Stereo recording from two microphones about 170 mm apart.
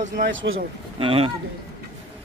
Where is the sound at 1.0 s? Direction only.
30° right (ahead or behind).